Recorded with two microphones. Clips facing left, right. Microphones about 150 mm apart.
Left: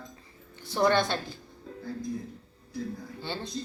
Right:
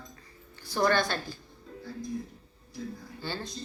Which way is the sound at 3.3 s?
25° left (ahead or behind).